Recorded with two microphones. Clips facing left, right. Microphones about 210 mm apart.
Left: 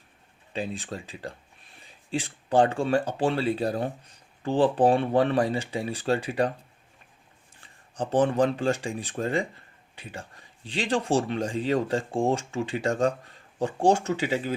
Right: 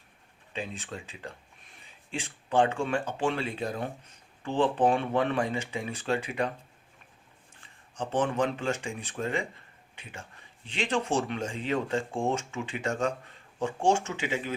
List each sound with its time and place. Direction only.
0.5 s speech: 35° left (ahead or behind)
7.9 s speech: 35° left (ahead or behind)